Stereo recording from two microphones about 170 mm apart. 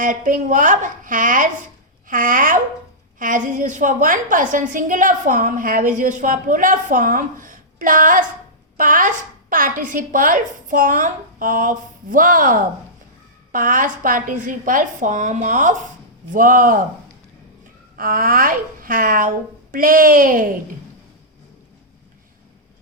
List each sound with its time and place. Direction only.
0.0 s a woman's voice: 50° right (ahead or behind)
17.9 s a woman's voice: 55° right (ahead or behind)